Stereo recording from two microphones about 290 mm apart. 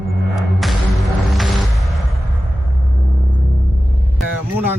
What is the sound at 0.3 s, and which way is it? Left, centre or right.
Music, centre.